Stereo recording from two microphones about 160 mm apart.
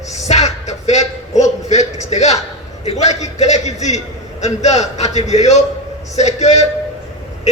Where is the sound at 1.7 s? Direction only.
45° left (ahead or behind).